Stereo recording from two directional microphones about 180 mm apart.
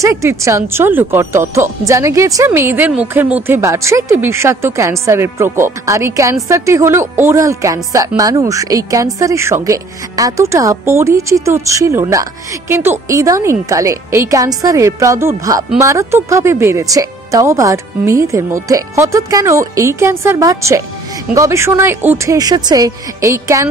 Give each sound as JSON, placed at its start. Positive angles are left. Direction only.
{"t": 0.0, "sound": "a woman's voice", "side_deg": -15}